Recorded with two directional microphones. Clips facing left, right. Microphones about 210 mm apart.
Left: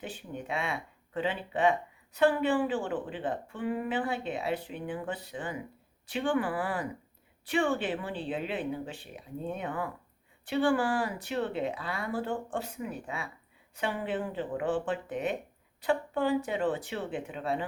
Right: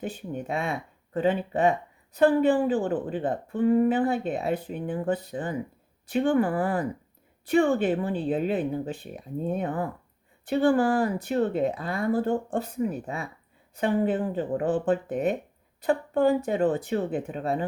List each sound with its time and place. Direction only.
0.0 s a woman's voice: 45° right (ahead or behind)